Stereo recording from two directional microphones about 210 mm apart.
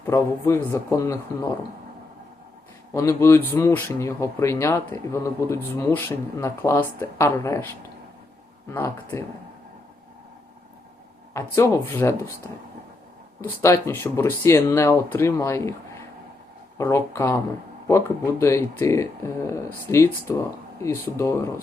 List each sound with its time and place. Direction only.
0.0 s speech: 15° left (ahead or behind)
2.9 s speech: 15° left (ahead or behind)
8.7 s speech: 10° left (ahead or behind)
11.3 s speech: 10° left (ahead or behind)
16.7 s speech: 15° left (ahead or behind)